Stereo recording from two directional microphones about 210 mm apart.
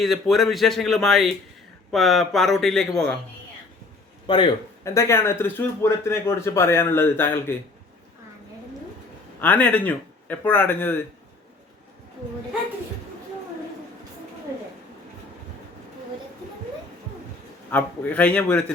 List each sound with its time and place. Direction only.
0.0 s speech: centre (ahead or behind)
4.3 s a man's voice: 25° left (ahead or behind)
4.8 s speech: 15° left (ahead or behind)
9.4 s speech: 5° left (ahead or behind)
17.7 s speech: 10° left (ahead or behind)